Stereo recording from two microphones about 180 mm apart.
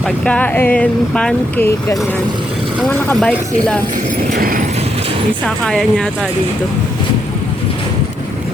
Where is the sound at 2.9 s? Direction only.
10° left (ahead or behind).